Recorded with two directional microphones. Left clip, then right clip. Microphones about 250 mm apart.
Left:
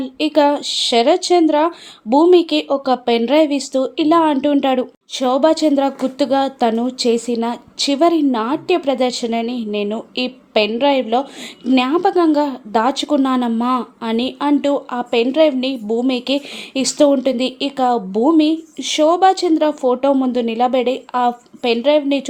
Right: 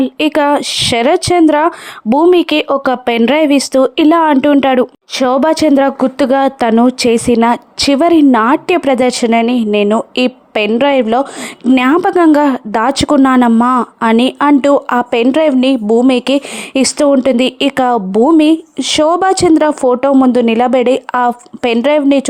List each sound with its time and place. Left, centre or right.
0.0 s speech: right